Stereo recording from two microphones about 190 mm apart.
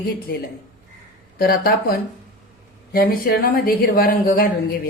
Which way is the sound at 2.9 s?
50° left (ahead or behind).